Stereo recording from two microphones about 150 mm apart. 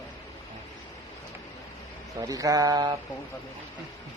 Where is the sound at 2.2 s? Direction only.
25° right (ahead or behind).